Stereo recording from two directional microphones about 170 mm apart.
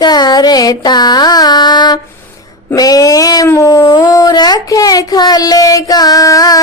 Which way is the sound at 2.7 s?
20° left (ahead or behind).